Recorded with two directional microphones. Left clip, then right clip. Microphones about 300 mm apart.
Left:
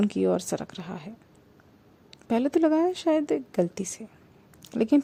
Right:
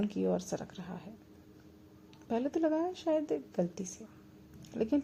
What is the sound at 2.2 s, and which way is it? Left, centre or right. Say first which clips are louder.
A woman's voice: left 9 dB; left.